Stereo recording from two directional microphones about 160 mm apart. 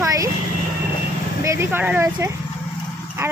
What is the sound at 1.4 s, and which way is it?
Speech, 15° right (ahead or behind).